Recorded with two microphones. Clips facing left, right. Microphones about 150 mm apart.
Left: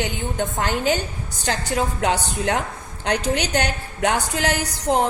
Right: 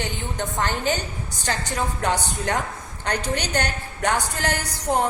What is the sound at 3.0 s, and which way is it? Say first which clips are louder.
A woman's voice: left 4 dB; 10° left (ahead or behind).